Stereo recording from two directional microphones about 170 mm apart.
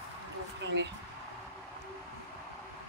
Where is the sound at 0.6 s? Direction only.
90° right.